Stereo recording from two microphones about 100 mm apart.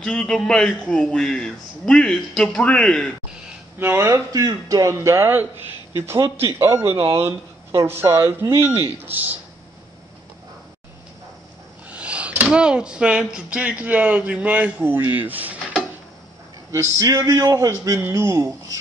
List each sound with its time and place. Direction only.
0.0 s a man's voice: 5° left (ahead or behind)
3.8 s speech: 25° right (ahead or behind)
4.3 s a man's voice: 40° right (ahead or behind); by 9.4 s 20° right (ahead or behind)
11.9 s speech: 10° right (ahead or behind)
17.0 s a man's voice: 35° right (ahead or behind)